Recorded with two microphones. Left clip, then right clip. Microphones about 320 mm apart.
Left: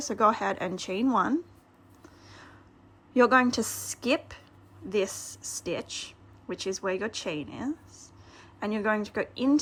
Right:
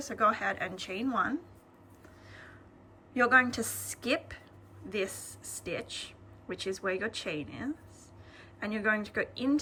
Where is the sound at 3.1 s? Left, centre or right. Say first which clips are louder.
Left 3 dB; centre.